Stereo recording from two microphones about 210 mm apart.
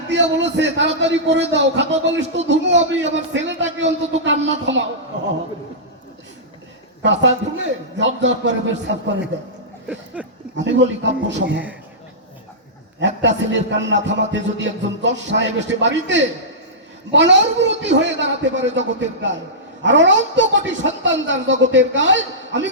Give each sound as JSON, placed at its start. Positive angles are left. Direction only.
{"t": 0.1, "sound": "a man's voice", "side_deg": -60}
{"t": 7.0, "sound": "a man's voice", "side_deg": -60}
{"t": 9.8, "sound": "a sound", "side_deg": -5}
{"t": 10.6, "sound": "a man's voice", "side_deg": -60}
{"t": 13.0, "sound": "a man's voice", "side_deg": -60}